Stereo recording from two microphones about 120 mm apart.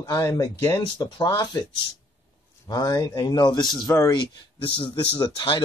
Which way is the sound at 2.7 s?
30° left (ahead or behind).